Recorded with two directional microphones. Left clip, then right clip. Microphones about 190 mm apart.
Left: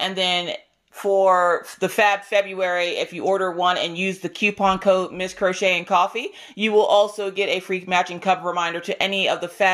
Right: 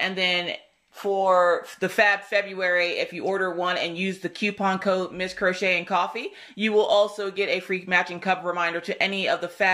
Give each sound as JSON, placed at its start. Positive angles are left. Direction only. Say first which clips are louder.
{"t": 0.0, "sound": "speech", "louder": "left 2 dB", "side_deg": 40}
{"t": 1.1, "sound": "speech", "louder": "left 3 dB", "side_deg": 55}
{"t": 2.0, "sound": "speech", "louder": "left 3 dB", "side_deg": 40}